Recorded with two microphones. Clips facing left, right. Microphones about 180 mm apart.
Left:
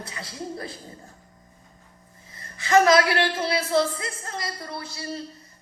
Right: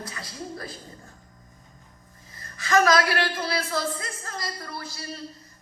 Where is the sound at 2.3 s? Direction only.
25° left (ahead or behind).